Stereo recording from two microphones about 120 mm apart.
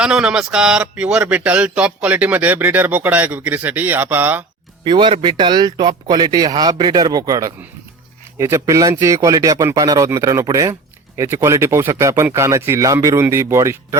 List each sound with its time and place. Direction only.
0.0 s a man's voice: 5° right (ahead or behind)
4.8 s a man's voice: 40° right (ahead or behind); by 14.0 s 25° right (ahead or behind)